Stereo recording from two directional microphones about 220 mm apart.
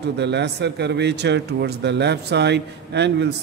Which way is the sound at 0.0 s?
50° right (ahead or behind).